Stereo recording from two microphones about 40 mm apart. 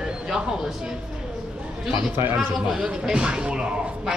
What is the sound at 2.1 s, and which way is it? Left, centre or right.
Speech, right.